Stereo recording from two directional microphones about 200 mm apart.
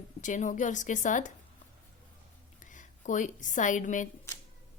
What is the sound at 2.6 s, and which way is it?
A woman's voice, 40° left (ahead or behind).